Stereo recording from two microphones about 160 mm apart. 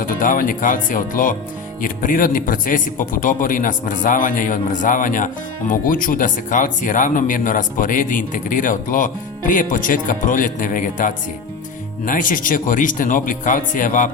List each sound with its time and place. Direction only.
0.0 s speech: 60° left (ahead or behind)